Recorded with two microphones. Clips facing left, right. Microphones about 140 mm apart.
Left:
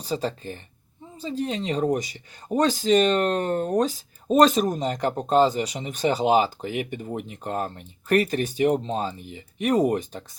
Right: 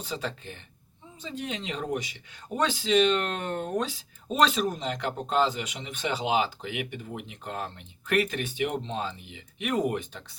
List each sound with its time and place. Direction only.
0.0 s speech: 40° left (ahead or behind)